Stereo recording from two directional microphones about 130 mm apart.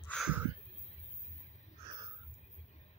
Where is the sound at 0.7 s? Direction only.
55° left (ahead or behind).